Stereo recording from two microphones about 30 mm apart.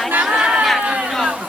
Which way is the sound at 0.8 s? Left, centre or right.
Right.